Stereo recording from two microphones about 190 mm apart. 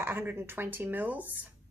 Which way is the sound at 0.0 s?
10° right (ahead or behind).